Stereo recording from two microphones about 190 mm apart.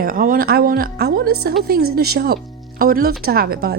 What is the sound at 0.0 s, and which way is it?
A woman's voice, 45° right (ahead or behind).